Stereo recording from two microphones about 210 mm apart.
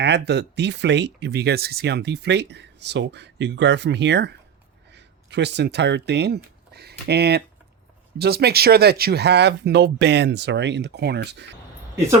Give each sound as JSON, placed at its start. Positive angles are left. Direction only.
{"t": 0.0, "sound": "speech", "side_deg": -55}